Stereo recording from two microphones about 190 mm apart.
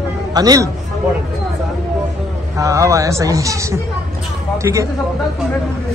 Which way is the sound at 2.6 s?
15° right (ahead or behind).